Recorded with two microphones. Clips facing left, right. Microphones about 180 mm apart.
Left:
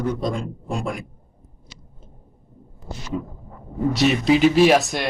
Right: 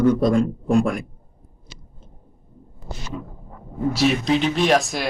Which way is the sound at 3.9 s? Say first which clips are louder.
Left 2 dB; centre (ahead or behind).